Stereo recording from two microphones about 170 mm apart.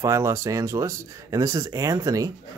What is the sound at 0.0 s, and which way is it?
Speech, 15° right (ahead or behind).